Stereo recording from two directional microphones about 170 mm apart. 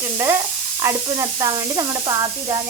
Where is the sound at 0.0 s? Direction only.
15° right (ahead or behind).